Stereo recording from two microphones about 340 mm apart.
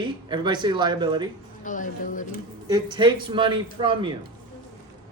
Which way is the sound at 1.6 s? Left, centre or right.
Left.